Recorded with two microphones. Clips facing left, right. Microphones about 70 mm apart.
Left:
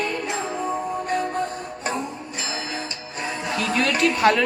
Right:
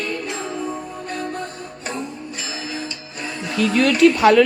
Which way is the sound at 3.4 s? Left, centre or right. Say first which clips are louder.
Right 6 dB; centre.